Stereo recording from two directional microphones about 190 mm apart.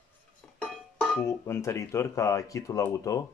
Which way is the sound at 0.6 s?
5° left (ahead or behind).